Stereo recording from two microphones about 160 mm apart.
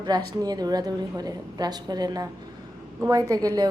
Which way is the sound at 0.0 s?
25° right (ahead or behind).